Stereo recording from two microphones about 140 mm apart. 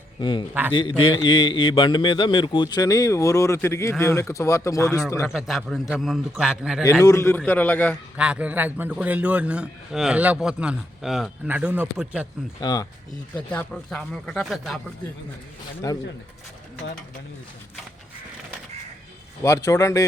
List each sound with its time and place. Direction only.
0.2 s a man's voice: 35° left (ahead or behind)
5.3 s a man's voice: centre (ahead or behind)
7.0 s a man's voice: 20° left (ahead or behind)
8.1 s a man's voice: 10° right (ahead or behind)
12.5 s a man's voice: 30° left (ahead or behind)
13.3 s a man's voice: 10° left (ahead or behind)
15.8 s a man's voice: 25° left (ahead or behind)
19.4 s a man's voice: 25° left (ahead or behind)